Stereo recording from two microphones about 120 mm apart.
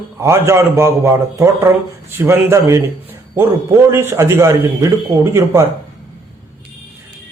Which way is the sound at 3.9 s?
20° right (ahead or behind).